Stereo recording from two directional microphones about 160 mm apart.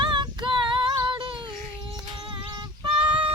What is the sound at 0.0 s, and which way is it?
Female singing, 30° right (ahead or behind).